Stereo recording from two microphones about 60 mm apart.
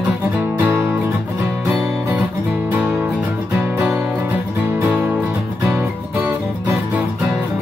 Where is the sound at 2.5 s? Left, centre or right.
Right.